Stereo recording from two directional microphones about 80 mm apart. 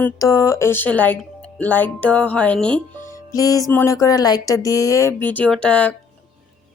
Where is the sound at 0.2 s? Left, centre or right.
Left; by 2.8 s centre.